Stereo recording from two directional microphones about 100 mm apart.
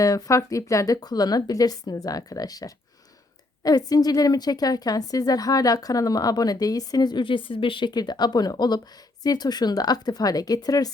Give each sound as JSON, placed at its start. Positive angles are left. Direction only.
{"t": 0.0, "sound": "a woman's voice", "side_deg": 35}